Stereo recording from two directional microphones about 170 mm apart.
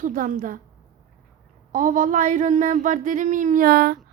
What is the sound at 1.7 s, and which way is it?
Speech, 50° right (ahead or behind).